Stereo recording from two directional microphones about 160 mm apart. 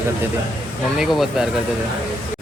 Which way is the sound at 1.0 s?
Centre (ahead or behind).